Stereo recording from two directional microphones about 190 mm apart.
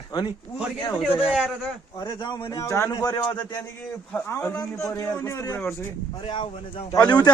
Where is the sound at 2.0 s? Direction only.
25° left (ahead or behind).